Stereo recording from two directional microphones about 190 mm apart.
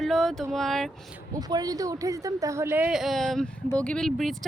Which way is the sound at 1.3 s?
20° right (ahead or behind).